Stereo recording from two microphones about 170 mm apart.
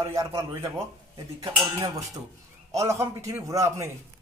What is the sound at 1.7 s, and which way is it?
A man's voice, 15° right (ahead or behind).